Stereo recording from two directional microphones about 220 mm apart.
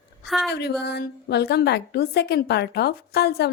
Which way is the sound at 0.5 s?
50° left (ahead or behind).